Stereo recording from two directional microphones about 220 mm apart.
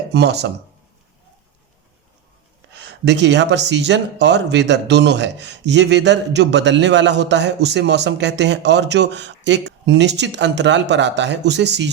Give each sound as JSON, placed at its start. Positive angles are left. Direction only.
{"t": 0.1, "sound": "speech", "side_deg": -50}
{"t": 2.7, "sound": "speech", "side_deg": -50}